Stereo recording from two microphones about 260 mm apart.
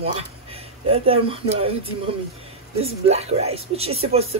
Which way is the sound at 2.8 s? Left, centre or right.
Right.